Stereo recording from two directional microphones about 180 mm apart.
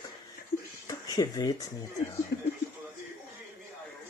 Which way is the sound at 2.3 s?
65° left (ahead or behind).